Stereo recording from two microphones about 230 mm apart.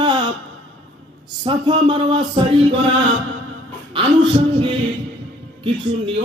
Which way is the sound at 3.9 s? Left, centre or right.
Right.